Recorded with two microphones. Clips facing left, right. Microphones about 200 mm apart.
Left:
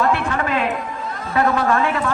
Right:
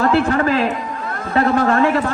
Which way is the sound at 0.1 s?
35° right (ahead or behind).